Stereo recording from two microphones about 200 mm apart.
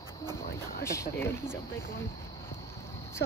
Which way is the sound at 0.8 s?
15° left (ahead or behind).